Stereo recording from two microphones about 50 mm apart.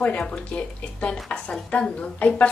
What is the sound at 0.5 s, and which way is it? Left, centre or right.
A woman's voice, left.